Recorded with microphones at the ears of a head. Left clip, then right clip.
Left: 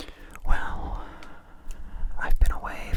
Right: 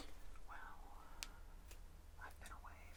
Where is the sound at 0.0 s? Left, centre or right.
Left.